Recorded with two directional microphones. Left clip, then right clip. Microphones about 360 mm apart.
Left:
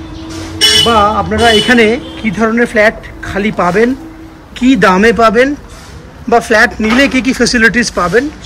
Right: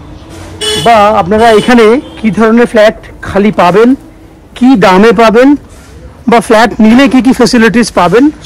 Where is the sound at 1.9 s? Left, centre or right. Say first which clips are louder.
Right 5 dB; centre.